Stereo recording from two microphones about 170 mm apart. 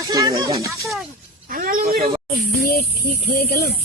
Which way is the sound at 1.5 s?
55° right (ahead or behind).